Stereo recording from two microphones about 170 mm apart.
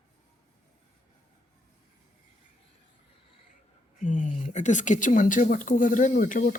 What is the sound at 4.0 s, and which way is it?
Speech, 45° left (ahead or behind).